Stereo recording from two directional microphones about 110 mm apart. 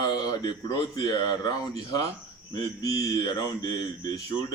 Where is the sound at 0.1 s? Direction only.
35° left (ahead or behind).